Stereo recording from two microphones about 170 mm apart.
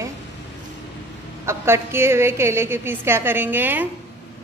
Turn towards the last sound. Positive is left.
turn(degrees=-10)  # may be behind; listen again after turning